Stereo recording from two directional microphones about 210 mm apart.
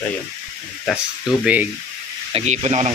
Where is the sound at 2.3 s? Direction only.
30° right (ahead or behind).